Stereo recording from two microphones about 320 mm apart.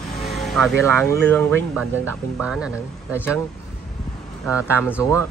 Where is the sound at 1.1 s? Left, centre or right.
Centre.